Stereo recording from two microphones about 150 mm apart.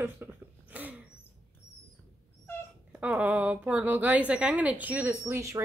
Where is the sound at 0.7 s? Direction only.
10° right (ahead or behind).